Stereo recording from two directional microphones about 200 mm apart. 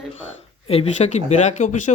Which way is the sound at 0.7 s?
30° left (ahead or behind).